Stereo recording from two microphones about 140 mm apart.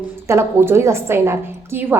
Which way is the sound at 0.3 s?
20° right (ahead or behind).